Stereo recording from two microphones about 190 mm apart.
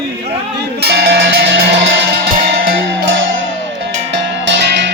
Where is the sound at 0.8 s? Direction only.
60° right (ahead or behind).